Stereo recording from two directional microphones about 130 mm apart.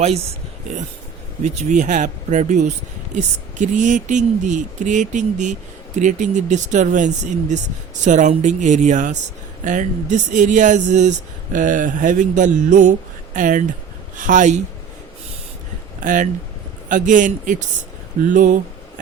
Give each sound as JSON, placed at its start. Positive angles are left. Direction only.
{"t": 1.5, "sound": "speech", "side_deg": -70}
{"t": 11.5, "sound": "speech", "side_deg": -85}
{"t": 16.0, "sound": "speech", "side_deg": -80}